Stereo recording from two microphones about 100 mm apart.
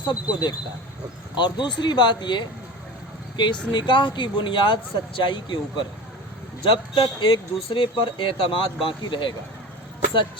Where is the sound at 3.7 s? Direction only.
50° left (ahead or behind).